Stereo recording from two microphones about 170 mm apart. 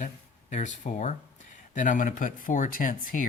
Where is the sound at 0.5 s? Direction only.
45° left (ahead or behind).